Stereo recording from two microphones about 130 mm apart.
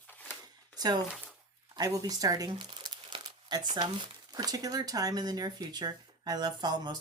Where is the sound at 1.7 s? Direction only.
30° right (ahead or behind).